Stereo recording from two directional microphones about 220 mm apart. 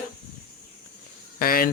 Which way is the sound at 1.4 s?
40° left (ahead or behind).